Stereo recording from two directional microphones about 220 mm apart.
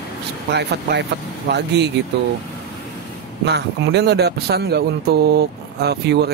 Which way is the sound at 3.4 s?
50° right (ahead or behind).